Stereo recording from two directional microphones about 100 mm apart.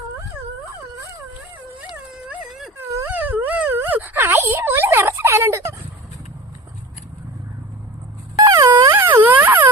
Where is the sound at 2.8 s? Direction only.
20° right (ahead or behind).